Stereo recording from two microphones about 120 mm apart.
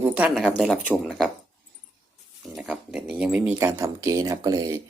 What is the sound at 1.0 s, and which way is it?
Speech, centre (ahead or behind).